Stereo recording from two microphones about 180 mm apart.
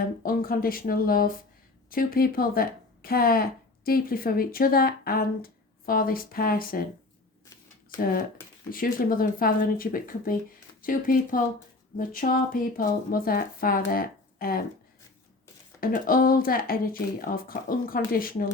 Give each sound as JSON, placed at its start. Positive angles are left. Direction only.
{"t": 0.0, "sound": "speech", "side_deg": 55}
{"t": 7.9, "sound": "speech", "side_deg": 55}
{"t": 15.8, "sound": "speech", "side_deg": 50}